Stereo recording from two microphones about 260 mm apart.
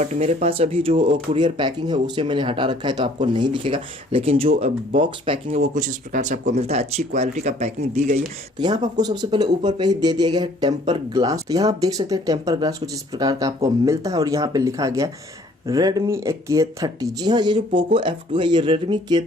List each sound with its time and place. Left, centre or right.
0.0 s speech: right